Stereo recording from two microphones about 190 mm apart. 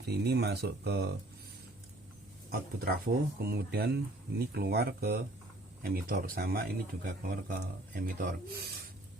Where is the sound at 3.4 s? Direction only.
55° right (ahead or behind).